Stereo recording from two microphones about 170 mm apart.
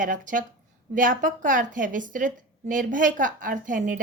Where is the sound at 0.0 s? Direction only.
50° right (ahead or behind).